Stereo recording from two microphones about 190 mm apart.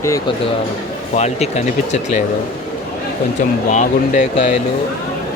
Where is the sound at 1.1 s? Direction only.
35° left (ahead or behind).